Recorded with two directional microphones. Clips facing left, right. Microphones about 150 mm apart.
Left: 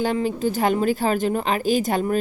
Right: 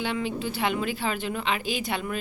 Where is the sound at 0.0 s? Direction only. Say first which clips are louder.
Left 7 dB; 40° left (ahead or behind).